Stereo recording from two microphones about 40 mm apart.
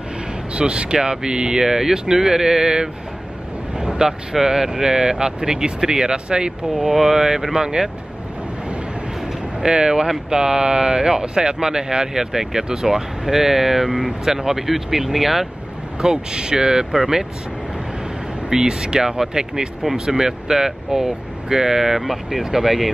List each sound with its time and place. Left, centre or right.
0.6 s speech: right
6.7 s speech: centre
9.6 s speech: centre
16.0 s speech: centre
18.5 s speech: centre